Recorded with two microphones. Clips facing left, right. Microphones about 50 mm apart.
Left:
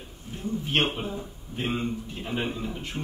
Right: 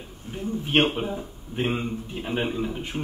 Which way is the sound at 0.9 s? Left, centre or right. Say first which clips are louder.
Right 4 dB; centre.